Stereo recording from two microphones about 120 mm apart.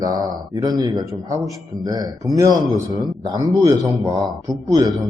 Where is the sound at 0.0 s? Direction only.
35° right (ahead or behind).